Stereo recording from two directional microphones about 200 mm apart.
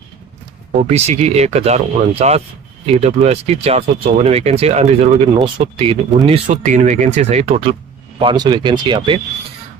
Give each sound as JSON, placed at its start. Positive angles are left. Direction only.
{"t": 0.8, "sound": "speech", "side_deg": -30}